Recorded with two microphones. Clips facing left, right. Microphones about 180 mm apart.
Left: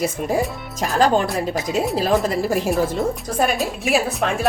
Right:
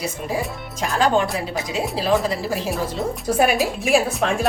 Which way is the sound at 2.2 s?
50° left (ahead or behind).